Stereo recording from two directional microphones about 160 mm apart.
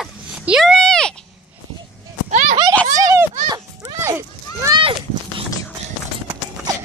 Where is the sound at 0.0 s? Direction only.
Centre (ahead or behind).